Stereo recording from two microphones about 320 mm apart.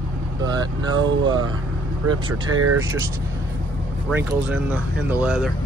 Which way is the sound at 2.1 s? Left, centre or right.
Right.